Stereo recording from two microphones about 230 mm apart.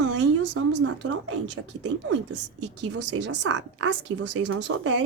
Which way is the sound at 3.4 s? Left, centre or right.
Right.